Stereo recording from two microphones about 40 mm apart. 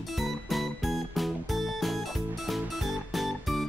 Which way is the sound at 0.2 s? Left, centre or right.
Centre.